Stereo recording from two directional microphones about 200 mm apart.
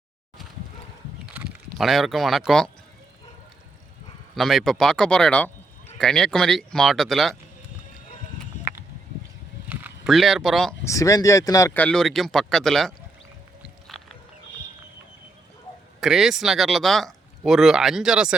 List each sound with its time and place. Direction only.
1.3 s speech: 5° right (ahead or behind)
4.4 s speech: centre (ahead or behind)
8.5 s a sound: 35° left (ahead or behind)
9.6 s a sound: 5° right (ahead or behind)
10.8 s speech: 15° left (ahead or behind)
13.8 s music: centre (ahead or behind)
16.0 s speech: centre (ahead or behind)